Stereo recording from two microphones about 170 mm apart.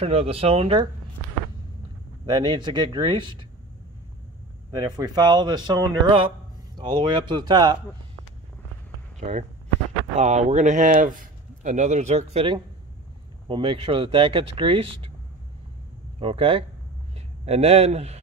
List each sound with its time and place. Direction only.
0.0 s speech: 35° right (ahead or behind)
2.2 s speech: 25° right (ahead or behind)
4.7 s speech: 25° right (ahead or behind)
9.2 s a man's voice: 40° right (ahead or behind)
16.2 s speech: 35° right (ahead or behind)